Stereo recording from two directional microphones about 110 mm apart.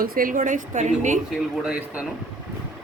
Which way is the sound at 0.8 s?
90° right.